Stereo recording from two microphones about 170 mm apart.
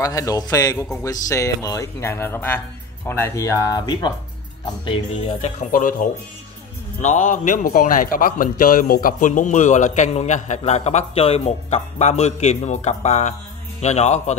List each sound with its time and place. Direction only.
0.0 s speech: 20° left (ahead or behind)
5.4 s a man's voice: 45° left (ahead or behind)